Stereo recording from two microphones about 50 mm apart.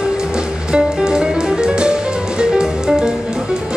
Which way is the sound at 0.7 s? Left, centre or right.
Centre.